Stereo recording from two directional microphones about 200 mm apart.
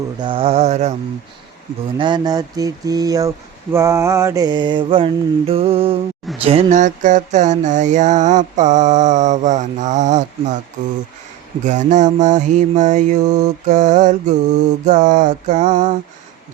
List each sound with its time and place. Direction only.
0.2 s mantra: 25° right (ahead or behind)
2.0 s speech: 20° right (ahead or behind)
6.4 s mantra: 30° right (ahead or behind)
11.6 s mantra: 35° right (ahead or behind)